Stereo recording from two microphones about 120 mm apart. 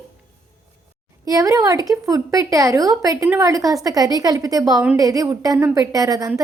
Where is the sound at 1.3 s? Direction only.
30° right (ahead or behind).